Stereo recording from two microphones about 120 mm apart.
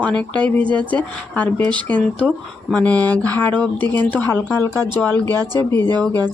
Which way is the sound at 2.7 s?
10° left (ahead or behind).